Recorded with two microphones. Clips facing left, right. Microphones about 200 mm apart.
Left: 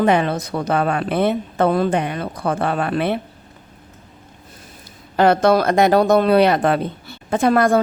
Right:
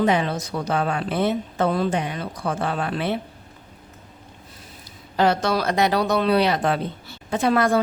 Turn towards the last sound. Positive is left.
turn(degrees=50)  # may be behind; listen again after turning